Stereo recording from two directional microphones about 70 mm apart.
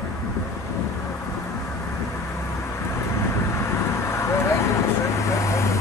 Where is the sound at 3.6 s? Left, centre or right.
Left.